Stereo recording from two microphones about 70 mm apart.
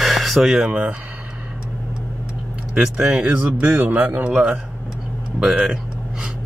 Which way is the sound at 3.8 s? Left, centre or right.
Right.